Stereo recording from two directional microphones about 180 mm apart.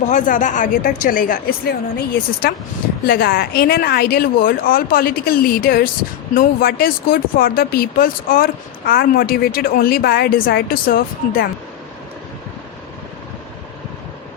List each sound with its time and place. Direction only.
0.0 s speech: 45° left (ahead or behind)